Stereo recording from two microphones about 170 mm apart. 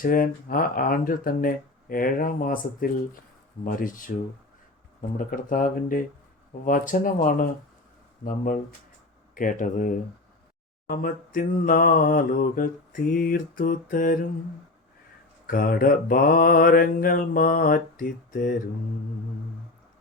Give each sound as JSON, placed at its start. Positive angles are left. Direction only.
{"t": 0.0, "sound": "mantra", "side_deg": 55}
{"t": 3.6, "sound": "speech", "side_deg": 55}
{"t": 4.9, "sound": "mantra", "side_deg": 50}
{"t": 6.7, "sound": "speech", "side_deg": 55}
{"t": 10.8, "sound": "mantra", "side_deg": 55}
{"t": 15.4, "sound": "mantra", "side_deg": 55}